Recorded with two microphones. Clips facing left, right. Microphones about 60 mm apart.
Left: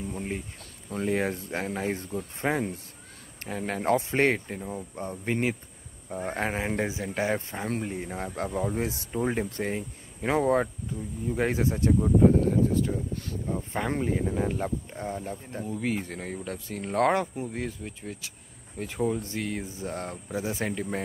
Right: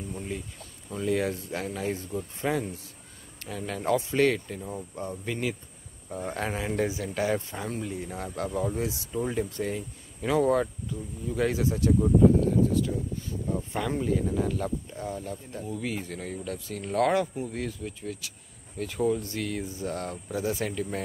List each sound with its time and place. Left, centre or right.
0.9 s speech: left
6.8 s speech: left
8.7 s speech: left
13.1 s speech: left
13.5 s speech: left